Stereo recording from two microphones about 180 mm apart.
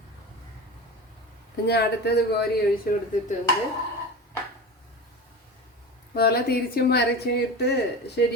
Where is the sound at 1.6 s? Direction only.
65° left (ahead or behind).